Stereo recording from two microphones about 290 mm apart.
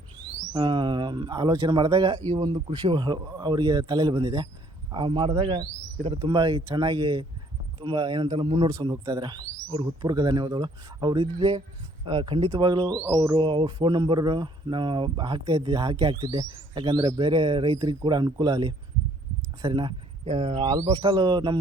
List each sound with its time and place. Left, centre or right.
0.5 s speech: centre